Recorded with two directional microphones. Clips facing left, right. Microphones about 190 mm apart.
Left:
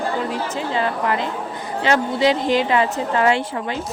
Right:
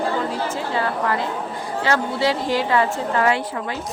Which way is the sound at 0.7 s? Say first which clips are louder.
Left 2 dB; 20° left (ahead or behind).